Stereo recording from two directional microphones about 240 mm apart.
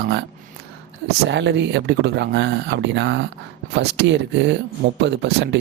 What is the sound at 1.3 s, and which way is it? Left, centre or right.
Speech, right.